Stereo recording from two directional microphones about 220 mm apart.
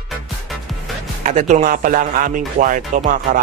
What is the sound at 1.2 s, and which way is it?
Speech, 35° right (ahead or behind).